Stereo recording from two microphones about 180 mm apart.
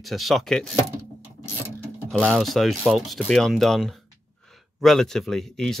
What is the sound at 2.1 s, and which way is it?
Speech, 5° left (ahead or behind).